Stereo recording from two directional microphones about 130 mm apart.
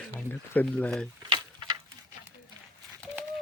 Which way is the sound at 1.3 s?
35° right (ahead or behind).